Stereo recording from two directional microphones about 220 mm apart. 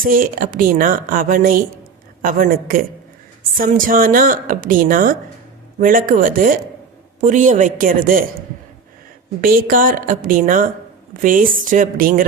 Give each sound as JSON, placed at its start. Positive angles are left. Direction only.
{"t": 0.0, "sound": "speech", "side_deg": -40}
{"t": 9.4, "sound": "speech", "side_deg": -40}